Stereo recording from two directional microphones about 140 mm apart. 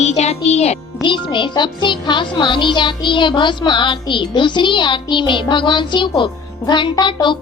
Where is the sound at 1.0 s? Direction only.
35° left (ahead or behind).